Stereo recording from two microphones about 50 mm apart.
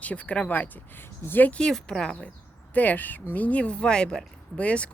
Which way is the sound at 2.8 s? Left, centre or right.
Left.